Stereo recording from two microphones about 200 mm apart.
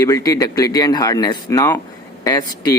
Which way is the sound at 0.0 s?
15° left (ahead or behind).